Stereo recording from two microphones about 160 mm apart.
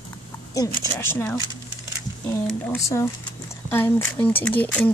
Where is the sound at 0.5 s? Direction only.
20° left (ahead or behind).